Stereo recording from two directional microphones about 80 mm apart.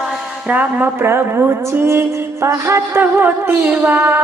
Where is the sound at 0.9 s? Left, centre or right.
Right.